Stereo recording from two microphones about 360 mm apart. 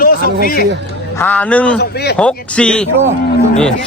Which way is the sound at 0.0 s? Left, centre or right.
Left.